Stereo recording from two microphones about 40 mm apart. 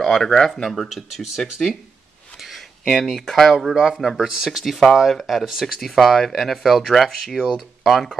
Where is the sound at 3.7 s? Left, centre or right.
Centre.